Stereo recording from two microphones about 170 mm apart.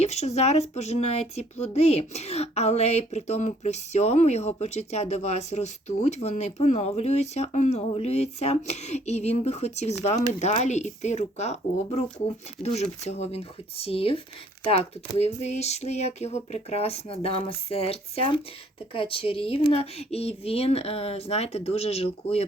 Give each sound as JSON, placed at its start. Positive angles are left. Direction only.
{"t": 0.0, "sound": "speech", "side_deg": 40}
{"t": 15.2, "sound": "speech", "side_deg": 40}